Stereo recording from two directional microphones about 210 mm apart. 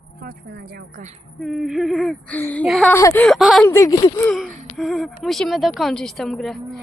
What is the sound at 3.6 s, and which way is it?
Speech, 15° left (ahead or behind).